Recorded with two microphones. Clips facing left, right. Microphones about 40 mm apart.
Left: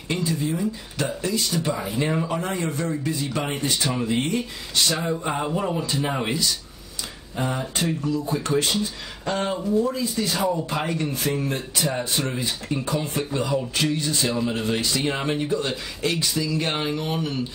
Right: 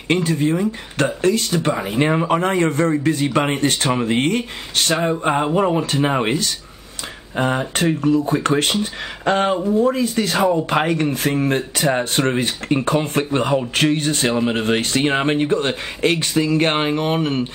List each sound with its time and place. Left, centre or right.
0.1 s speech: right
9.6 s speech: right
9.8 s speech: right